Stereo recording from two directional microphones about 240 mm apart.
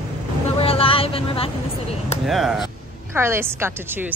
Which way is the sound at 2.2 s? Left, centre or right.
Centre.